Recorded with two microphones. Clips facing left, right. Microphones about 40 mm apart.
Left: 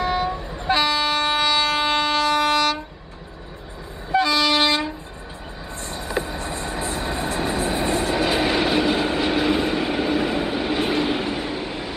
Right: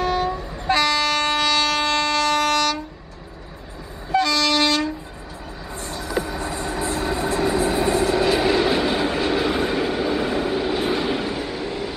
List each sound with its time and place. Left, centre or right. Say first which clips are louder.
0.0 s train: right 1 dB; centre
4.1 s train: left 1 dB; centre
5.9 s vehicle: right 1 dB; left
8.9 s train: even; left